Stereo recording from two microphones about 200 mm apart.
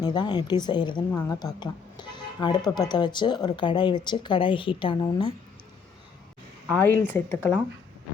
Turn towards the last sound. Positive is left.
turn(degrees=10)  # may be behind; listen again after turning